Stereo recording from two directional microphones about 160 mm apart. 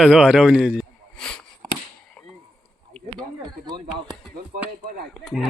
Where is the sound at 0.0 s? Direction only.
5° right (ahead or behind).